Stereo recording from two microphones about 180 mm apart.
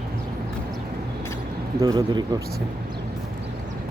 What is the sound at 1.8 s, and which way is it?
Speech, 20° right (ahead or behind).